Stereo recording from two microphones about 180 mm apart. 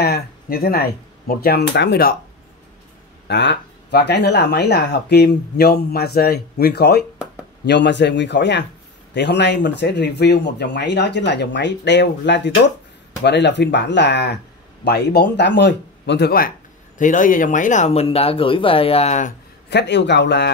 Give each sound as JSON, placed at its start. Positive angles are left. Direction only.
{"t": 0.0, "sound": "speech", "side_deg": 60}
{"t": 3.3, "sound": "speech", "side_deg": 70}
{"t": 19.7, "sound": "speech", "side_deg": 70}